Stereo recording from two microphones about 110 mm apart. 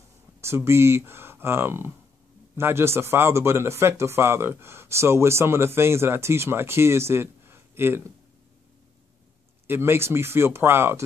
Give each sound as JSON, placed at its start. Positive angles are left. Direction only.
{"t": 0.4, "sound": "speech", "side_deg": -25}
{"t": 9.7, "sound": "speech", "side_deg": -20}